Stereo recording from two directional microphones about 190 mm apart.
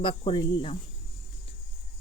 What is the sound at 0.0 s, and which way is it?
Speech, 25° left (ahead or behind).